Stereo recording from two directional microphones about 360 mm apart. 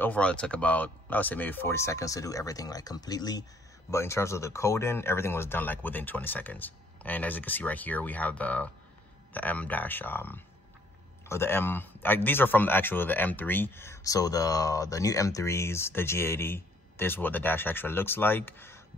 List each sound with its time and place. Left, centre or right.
0.0 s speech: centre